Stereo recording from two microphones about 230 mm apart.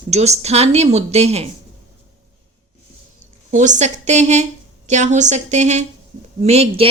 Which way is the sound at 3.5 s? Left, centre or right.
Right.